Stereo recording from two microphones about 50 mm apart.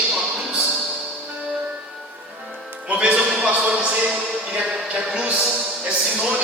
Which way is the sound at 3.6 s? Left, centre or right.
Right.